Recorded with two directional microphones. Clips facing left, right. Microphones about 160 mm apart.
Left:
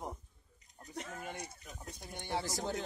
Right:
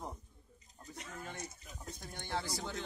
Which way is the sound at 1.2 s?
15° left (ahead or behind).